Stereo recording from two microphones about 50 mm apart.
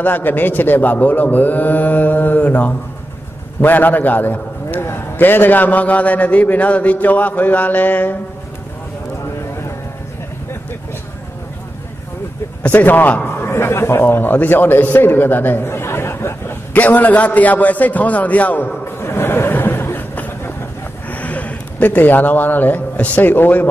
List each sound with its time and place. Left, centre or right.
0.0 s a man's voice: left
12.6 s a man's voice: left
13.3 s a man's voice: left
14.3 s a man's voice: left
16.7 s a man's voice: left
18.9 s a sound: left
21.1 s a man's voice: left